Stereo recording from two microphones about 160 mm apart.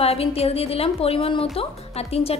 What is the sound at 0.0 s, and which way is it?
A woman's voice, 40° left (ahead or behind).